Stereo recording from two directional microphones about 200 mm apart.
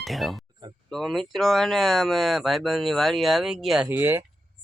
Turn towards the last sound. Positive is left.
turn(degrees=-10)  # may be behind; listen again after turning